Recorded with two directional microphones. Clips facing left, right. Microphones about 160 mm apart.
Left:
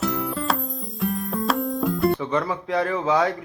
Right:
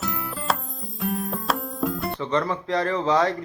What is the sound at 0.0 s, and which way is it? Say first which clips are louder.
Music: left 6 dB; centre (ahead or behind).